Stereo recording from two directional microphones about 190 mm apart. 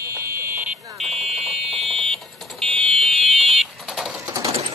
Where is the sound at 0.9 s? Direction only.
Centre (ahead or behind).